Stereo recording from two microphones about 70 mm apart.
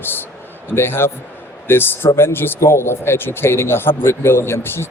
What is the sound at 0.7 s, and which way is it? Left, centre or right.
A man's voice, left.